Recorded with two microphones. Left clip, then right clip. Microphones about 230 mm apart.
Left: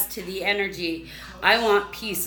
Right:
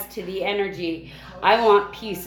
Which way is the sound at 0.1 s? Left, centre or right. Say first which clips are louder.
Even; centre.